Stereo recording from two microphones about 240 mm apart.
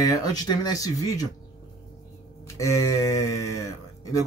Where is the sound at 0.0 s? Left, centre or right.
Centre.